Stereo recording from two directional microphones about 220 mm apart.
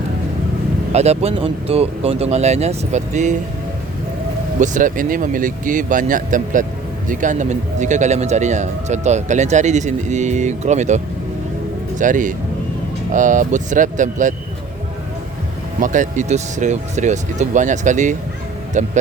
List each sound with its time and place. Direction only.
0.9 s speech: 30° right (ahead or behind)
4.6 s speech: 35° right (ahead or behind)
15.8 s speech: 35° right (ahead or behind)